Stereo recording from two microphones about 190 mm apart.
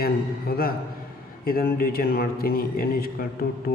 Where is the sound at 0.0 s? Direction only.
50° left (ahead or behind).